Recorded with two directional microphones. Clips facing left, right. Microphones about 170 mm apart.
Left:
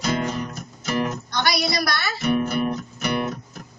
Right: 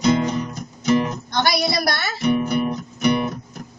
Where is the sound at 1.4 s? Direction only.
25° right (ahead or behind).